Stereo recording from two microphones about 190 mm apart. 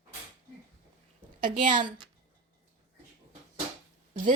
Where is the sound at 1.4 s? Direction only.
45° right (ahead or behind).